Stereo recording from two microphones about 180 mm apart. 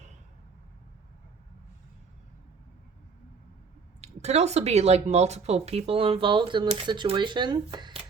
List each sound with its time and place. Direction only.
4.0 s speech: 35° right (ahead or behind)